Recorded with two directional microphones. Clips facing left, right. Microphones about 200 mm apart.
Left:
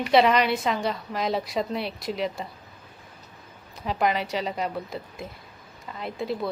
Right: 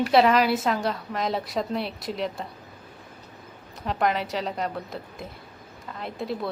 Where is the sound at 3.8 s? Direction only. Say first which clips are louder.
Even; centre (ahead or behind).